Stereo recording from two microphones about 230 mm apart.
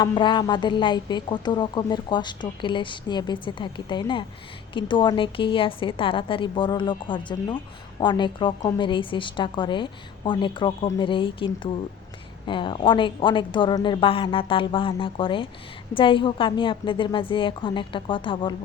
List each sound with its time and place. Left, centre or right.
0.0 s a woman's voice: centre